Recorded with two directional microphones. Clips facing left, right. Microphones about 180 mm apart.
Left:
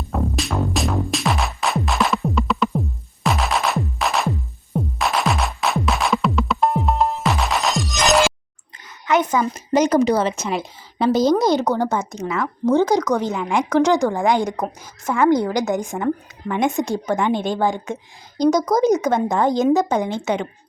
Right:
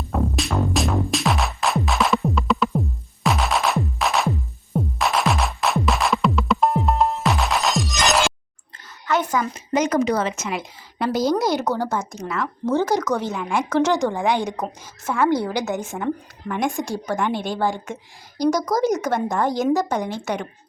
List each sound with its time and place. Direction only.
0.1 s music: centre (ahead or behind)
9.0 s a sound: 20° left (ahead or behind)
9.5 s a woman's voice: 35° left (ahead or behind); by 11.5 s 20° left (ahead or behind)
11.7 s speech: 5° right (ahead or behind)
12.6 s a woman's voice: 15° left (ahead or behind)